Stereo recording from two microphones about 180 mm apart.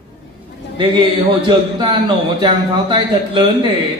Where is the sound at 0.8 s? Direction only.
25° right (ahead or behind).